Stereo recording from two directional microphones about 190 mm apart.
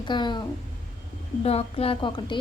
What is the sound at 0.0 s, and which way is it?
Speech, 25° left (ahead or behind).